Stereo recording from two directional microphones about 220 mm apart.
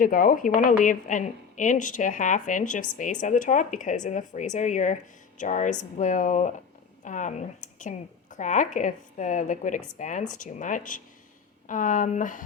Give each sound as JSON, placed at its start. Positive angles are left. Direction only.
{"t": 0.0, "sound": "a woman's voice", "side_deg": 40}